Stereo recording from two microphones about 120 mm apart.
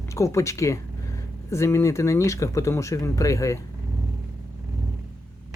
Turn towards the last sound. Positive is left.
turn(degrees=25)  # may be behind; listen again after turning